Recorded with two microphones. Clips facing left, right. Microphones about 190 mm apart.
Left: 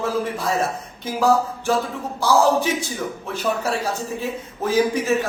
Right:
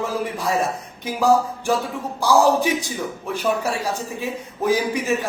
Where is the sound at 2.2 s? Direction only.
15° right (ahead or behind).